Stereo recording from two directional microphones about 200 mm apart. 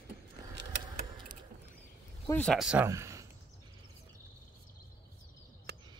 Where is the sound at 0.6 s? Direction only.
60° right (ahead or behind).